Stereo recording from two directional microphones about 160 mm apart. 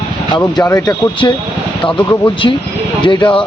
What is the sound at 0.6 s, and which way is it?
Speech, 20° left (ahead or behind).